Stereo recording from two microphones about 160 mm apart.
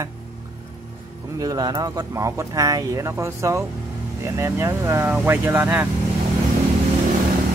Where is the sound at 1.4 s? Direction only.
25° right (ahead or behind).